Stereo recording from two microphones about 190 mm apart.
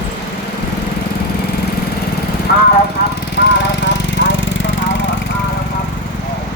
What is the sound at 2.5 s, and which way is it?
Vehicle, 55° left (ahead or behind).